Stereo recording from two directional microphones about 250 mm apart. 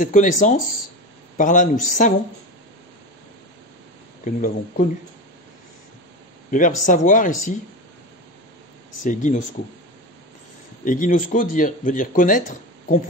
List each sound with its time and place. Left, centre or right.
0.0 s speech: left
4.2 s speech: left
6.5 s speech: left
9.0 s speech: left
10.8 s speech: left